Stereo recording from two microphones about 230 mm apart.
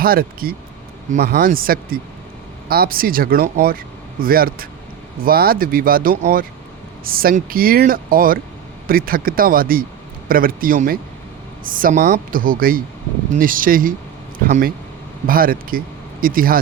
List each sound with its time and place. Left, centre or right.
0.0 s speech: right